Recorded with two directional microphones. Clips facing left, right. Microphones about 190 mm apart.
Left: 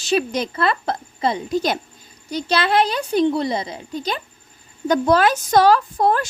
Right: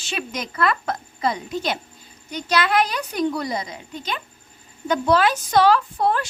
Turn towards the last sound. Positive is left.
turn(degrees=45)  # may be behind; listen again after turning